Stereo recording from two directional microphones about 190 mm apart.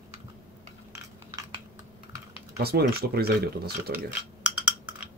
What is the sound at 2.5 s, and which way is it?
Speech, 55° right (ahead or behind).